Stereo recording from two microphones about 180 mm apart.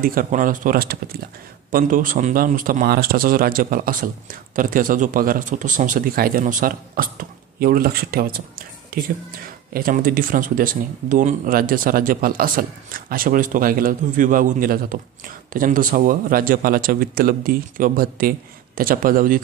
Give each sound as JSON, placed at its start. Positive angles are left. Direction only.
{"t": 0.0, "sound": "speech", "side_deg": -50}